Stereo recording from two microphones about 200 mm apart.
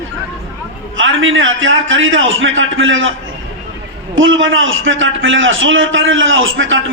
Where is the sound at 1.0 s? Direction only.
75° right (ahead or behind).